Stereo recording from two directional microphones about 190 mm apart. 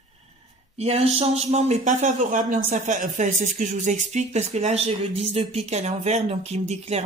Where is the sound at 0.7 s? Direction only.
35° right (ahead or behind).